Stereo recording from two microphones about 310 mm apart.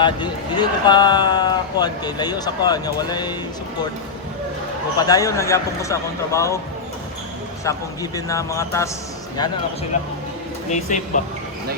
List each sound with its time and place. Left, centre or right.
0.0 s speech: centre
4.9 s speech: centre
7.6 s speech: centre
9.9 s speech: left